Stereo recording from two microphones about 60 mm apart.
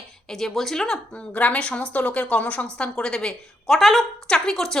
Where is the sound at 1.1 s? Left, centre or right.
Left.